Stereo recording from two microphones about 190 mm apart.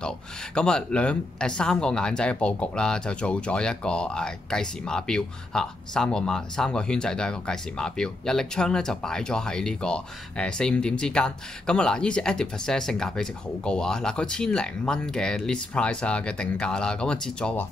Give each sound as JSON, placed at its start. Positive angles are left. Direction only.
{"t": 0.6, "sound": "speech", "side_deg": 5}